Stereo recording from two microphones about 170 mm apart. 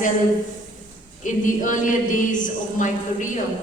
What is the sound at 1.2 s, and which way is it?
A woman's voice, 50° left (ahead or behind).